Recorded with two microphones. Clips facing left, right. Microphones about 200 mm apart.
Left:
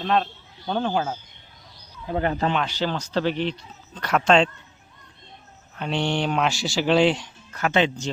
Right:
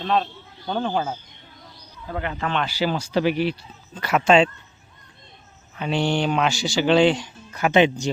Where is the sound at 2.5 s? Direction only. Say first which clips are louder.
Right 2 dB; 5° right (ahead or behind).